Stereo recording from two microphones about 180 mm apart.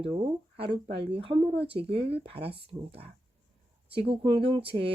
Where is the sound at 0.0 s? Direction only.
30° right (ahead or behind).